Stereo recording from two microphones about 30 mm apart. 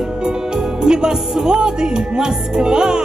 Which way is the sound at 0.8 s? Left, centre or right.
Right.